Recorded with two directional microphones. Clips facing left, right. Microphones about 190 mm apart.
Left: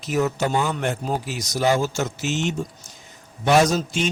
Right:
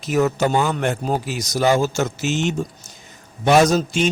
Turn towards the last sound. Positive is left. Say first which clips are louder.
# right 4 dB
turn(degrees=-70)  # may be behind; listen again after turning